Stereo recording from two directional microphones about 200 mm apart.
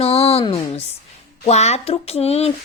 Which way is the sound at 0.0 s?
30° left (ahead or behind).